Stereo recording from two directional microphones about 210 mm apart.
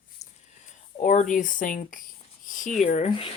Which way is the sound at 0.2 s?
35° left (ahead or behind).